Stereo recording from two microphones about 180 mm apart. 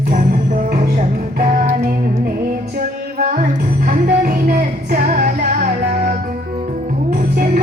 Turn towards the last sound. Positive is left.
turn(degrees=-50)  # may be behind; listen again after turning